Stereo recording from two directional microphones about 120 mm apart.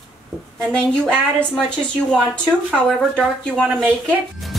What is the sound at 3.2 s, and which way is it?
Speech, 5° left (ahead or behind).